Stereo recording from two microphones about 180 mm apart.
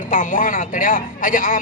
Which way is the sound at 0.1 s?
45° left (ahead or behind).